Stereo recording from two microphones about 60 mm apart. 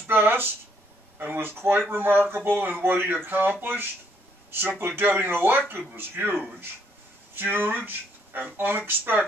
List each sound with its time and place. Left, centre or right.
0.0 s speech: right